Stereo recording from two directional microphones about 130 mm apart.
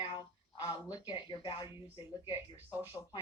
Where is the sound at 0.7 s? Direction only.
30° left (ahead or behind).